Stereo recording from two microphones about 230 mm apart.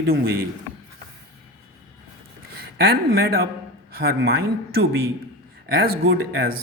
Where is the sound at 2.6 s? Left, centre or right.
Right.